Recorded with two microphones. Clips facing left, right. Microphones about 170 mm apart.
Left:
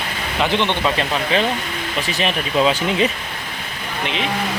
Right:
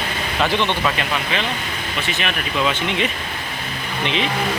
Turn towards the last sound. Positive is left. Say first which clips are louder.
# right 2 dB
turn(degrees=0)  # may be behind; listen again after turning